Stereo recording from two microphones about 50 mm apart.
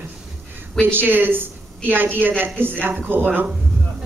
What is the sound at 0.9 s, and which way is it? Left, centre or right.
A woman's voice, right.